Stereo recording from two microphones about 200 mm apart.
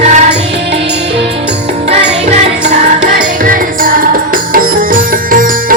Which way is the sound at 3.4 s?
45° right (ahead or behind).